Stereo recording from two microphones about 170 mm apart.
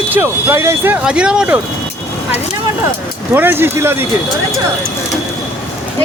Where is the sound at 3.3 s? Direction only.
10° right (ahead or behind).